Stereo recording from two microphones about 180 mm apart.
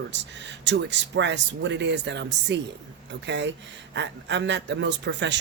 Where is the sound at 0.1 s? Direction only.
80° right.